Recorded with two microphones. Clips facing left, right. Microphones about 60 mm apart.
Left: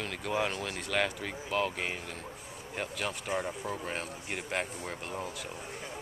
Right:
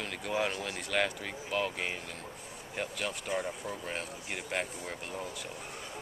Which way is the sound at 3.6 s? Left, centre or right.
Centre.